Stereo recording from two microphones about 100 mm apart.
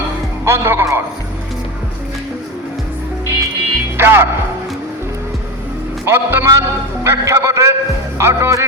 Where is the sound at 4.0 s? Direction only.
25° right (ahead or behind).